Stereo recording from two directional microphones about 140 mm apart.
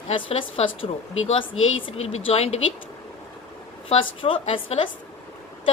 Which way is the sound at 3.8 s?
40° left (ahead or behind).